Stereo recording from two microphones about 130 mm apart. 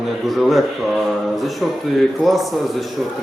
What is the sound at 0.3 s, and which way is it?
A man's voice, centre (ahead or behind).